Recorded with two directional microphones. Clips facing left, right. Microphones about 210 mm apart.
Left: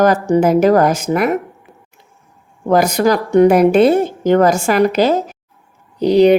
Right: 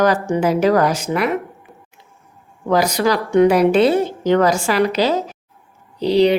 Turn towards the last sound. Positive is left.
turn(degrees=50)  # may be behind; listen again after turning